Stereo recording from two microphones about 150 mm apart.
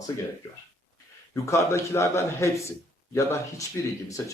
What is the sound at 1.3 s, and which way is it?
Speech, 20° left (ahead or behind).